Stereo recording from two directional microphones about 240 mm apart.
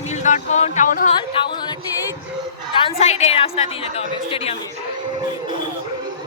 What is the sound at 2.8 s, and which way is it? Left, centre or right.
Speech, left.